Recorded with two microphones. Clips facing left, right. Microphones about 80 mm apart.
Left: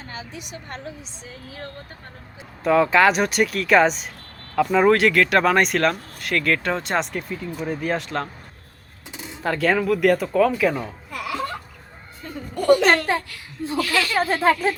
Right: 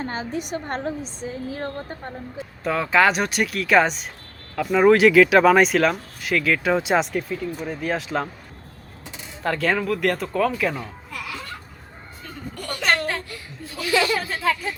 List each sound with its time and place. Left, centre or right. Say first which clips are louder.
0.0 s a woman's voice: right 8 dB; right
2.6 s speech: left 3 dB; centre
9.4 s speech: left 2 dB; centre
12.7 s speech: left 6 dB; centre
13.7 s speech: right 1 dB; right
14.2 s a child's voice: left 6 dB; left